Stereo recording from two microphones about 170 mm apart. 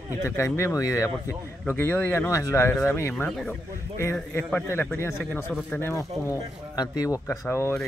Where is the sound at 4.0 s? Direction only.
15° left (ahead or behind).